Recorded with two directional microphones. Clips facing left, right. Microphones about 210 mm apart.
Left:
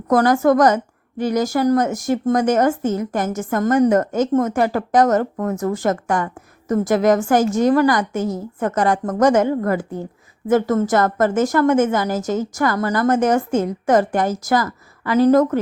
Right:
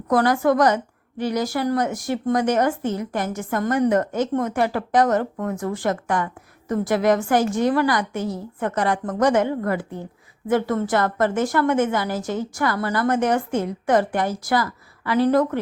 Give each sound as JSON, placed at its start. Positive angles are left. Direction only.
{"t": 0.1, "sound": "speech", "side_deg": 45}